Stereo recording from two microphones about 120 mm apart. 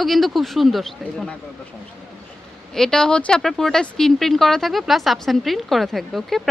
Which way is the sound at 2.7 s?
5° left (ahead or behind).